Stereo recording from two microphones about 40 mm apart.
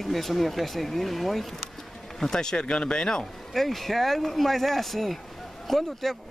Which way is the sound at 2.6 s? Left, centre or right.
Left.